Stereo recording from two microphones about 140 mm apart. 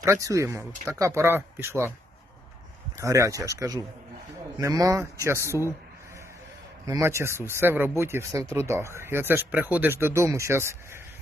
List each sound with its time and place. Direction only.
0.0 s speech: 20° right (ahead or behind)
3.0 s speech: 20° right (ahead or behind)
6.8 s speech: 20° right (ahead or behind)